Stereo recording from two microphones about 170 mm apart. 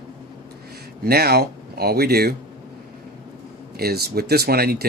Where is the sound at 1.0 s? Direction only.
65° right (ahead or behind).